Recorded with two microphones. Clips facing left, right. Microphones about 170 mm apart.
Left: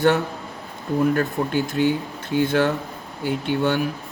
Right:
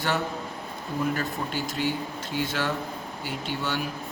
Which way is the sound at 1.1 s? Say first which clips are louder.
Left 8 dB; 55° left (ahead or behind).